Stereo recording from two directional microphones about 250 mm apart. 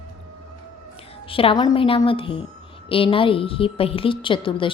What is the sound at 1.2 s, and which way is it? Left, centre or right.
A woman's voice, left.